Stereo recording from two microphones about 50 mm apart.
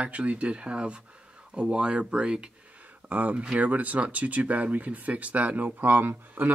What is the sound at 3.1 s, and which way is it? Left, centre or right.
Speech, right.